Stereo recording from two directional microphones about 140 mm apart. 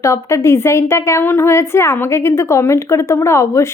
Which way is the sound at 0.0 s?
20° left (ahead or behind).